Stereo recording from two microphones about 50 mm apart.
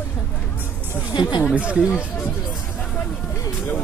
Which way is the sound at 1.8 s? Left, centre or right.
Left.